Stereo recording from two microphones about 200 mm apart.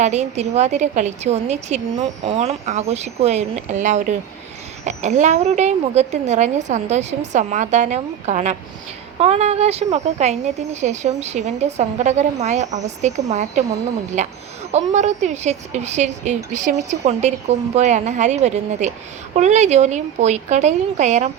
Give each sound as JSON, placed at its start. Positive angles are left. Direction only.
{"t": 0.0, "sound": "a woman's voice", "side_deg": -35}